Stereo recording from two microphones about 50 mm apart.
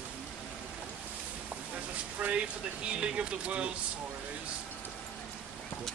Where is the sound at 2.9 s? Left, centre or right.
Right.